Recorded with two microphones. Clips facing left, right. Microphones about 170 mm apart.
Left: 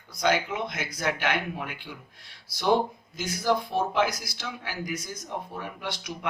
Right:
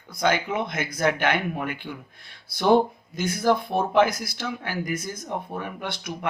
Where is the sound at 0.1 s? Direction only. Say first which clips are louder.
Right 2 dB; 55° right (ahead or behind).